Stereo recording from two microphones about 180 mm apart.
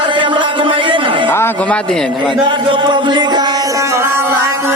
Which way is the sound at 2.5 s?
25° right (ahead or behind).